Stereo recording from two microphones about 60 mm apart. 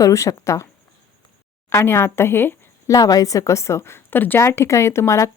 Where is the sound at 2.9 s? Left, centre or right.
Left.